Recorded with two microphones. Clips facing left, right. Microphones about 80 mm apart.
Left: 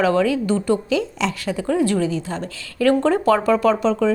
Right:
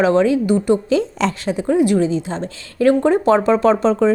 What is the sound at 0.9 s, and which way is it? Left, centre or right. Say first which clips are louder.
Speech: right 4 dB; right.